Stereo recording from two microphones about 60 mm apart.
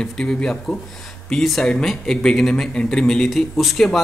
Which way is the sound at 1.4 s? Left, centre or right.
Centre.